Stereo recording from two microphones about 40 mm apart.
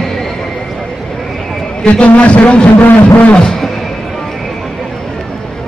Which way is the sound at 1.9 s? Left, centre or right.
Left.